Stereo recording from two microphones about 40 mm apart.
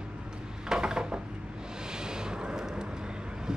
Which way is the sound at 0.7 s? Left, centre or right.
Centre.